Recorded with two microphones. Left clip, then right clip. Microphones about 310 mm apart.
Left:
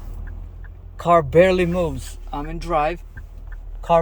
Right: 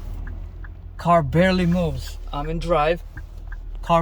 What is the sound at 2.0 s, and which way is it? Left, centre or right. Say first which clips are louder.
Speech: even; centre.